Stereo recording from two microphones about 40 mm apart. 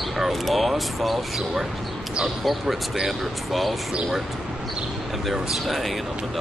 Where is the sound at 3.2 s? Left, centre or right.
Centre.